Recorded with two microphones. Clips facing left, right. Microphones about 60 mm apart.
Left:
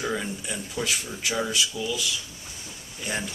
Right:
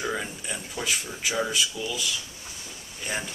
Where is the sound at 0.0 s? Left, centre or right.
Centre.